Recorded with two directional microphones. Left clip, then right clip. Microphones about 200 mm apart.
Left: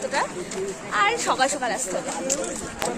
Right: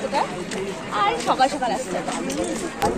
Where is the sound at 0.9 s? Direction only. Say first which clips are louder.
Right 1 dB; 5° left (ahead or behind).